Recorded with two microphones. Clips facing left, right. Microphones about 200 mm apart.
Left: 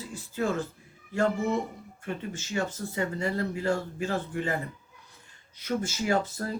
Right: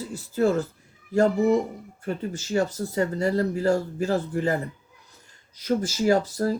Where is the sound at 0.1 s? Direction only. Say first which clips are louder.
Right 7 dB; 40° right (ahead or behind).